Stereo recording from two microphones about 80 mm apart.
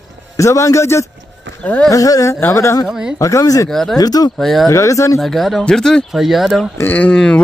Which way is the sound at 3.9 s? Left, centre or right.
Left.